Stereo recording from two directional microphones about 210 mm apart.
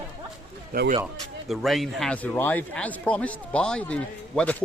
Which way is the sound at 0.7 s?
40° right (ahead or behind).